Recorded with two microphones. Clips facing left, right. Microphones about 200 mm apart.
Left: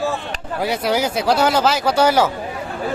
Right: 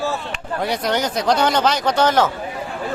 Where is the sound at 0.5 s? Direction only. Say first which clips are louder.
Left 2 dB; 5° left (ahead or behind).